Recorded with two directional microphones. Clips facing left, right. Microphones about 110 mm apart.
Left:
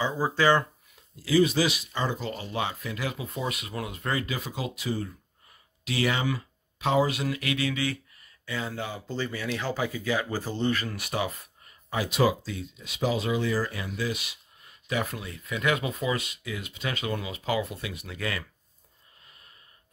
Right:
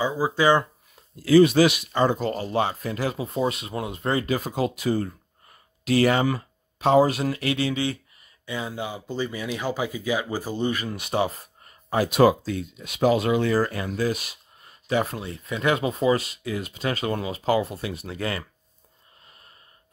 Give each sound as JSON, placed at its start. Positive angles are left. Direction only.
{"t": 0.0, "sound": "speech", "side_deg": -10}
{"t": 1.2, "sound": "speech", "side_deg": -60}